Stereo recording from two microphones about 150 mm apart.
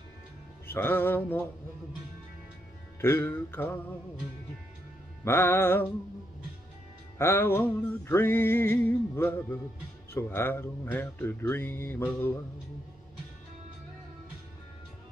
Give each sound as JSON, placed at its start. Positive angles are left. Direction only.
{"t": 0.7, "sound": "music", "side_deg": 15}
{"t": 3.0, "sound": "music", "side_deg": 15}
{"t": 5.2, "sound": "music", "side_deg": 15}
{"t": 7.2, "sound": "music", "side_deg": 15}